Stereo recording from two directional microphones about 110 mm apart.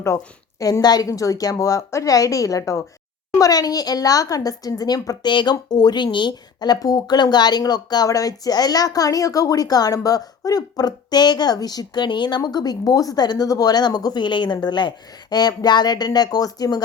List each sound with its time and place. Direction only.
0.6 s a woman's voice: 35° left (ahead or behind)